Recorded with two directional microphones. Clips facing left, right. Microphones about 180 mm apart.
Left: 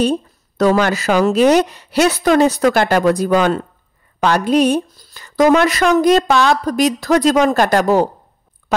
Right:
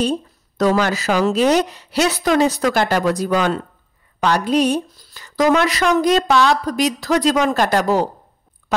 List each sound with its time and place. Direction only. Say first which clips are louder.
0.6 s a woman's voice: left 3 dB; 60° left (ahead or behind)